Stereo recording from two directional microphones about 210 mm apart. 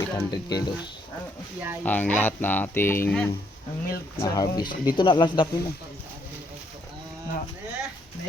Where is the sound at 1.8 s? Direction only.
10° left (ahead or behind).